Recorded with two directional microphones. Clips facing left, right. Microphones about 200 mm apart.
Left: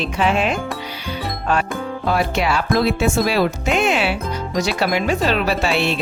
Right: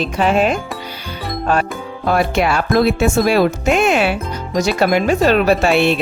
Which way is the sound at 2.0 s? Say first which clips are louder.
Right 4 dB; 50° right (ahead or behind).